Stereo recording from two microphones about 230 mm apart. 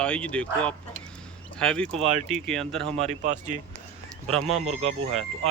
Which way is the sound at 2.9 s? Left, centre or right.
Right.